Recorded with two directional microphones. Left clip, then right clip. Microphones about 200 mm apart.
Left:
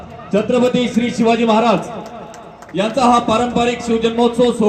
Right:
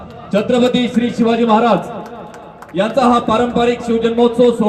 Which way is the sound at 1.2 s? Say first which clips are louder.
Right 1 dB; 45° left (ahead or behind).